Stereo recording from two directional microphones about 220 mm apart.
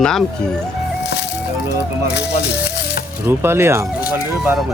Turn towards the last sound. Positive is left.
turn(degrees=-10)  # may be behind; listen again after turning